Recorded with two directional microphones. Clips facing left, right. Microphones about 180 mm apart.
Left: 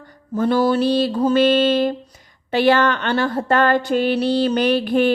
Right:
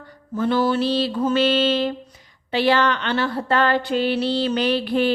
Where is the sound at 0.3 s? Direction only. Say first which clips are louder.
Left 3 dB; 40° left (ahead or behind).